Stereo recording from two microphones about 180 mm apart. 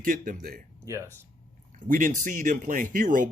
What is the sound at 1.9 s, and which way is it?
Speech, 45° right (ahead or behind).